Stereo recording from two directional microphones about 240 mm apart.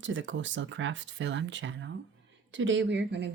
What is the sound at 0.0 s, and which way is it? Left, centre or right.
Speech, right.